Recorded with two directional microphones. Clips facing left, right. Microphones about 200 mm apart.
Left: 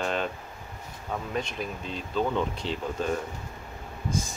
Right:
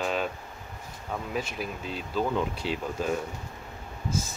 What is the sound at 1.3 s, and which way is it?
Speech, 5° right (ahead or behind).